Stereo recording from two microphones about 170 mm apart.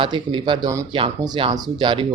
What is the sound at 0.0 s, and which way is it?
A man's voice, 30° right (ahead or behind).